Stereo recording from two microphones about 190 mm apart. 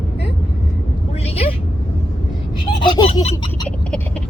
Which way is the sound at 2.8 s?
25° left (ahead or behind).